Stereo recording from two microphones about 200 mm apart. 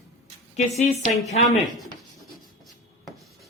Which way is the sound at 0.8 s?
35° left (ahead or behind).